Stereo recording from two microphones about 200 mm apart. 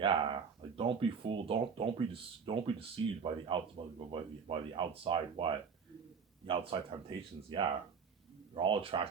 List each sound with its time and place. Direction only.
0.0 s speech: 25° right (ahead or behind)